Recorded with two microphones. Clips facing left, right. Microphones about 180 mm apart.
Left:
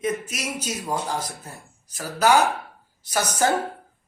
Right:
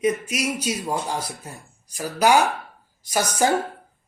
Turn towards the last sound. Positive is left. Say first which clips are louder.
# right 1 dB
turn(degrees=-10)  # may be behind; listen again after turning